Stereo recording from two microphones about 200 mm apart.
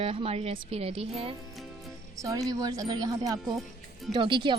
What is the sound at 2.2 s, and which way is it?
A woman's voice, 15° right (ahead or behind).